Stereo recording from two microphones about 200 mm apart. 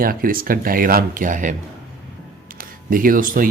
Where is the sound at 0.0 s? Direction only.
45° right (ahead or behind).